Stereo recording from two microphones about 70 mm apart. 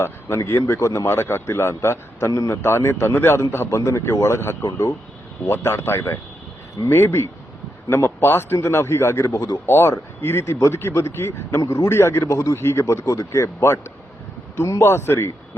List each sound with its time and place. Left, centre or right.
0.0 s speech: left
2.6 s speech: left
9.2 s speech: left
9.6 s speech: left